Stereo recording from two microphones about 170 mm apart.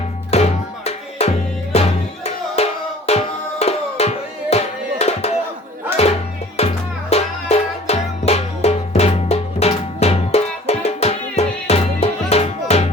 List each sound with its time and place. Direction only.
0.3 s music: 40° left (ahead or behind)